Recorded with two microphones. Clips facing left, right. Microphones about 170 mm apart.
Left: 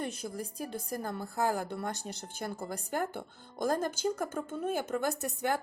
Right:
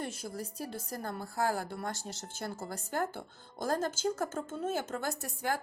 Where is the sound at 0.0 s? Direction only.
20° left (ahead or behind).